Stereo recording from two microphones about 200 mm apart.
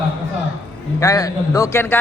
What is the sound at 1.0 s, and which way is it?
Speech, 15° left (ahead or behind).